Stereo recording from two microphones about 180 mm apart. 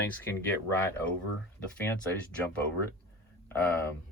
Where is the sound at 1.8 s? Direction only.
10° left (ahead or behind).